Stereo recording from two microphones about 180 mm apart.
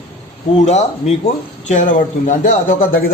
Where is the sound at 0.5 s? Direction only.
40° left (ahead or behind).